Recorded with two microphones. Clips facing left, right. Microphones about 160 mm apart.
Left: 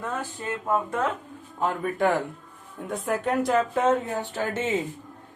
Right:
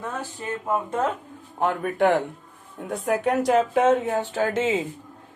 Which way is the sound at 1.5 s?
60° right (ahead or behind).